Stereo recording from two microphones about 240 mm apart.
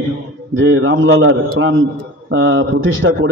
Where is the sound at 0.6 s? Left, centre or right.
Right.